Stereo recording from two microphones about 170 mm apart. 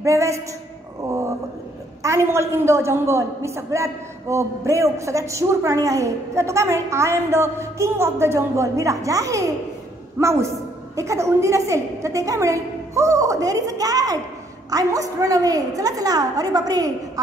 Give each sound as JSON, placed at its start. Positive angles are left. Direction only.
{"t": 0.0, "sound": "a man's voice", "side_deg": -15}
{"t": 2.0, "sound": "a man's voice", "side_deg": -15}